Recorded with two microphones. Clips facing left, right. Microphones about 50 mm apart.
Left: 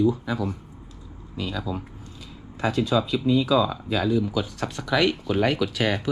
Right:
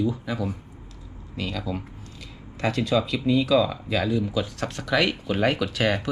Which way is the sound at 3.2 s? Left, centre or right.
Centre.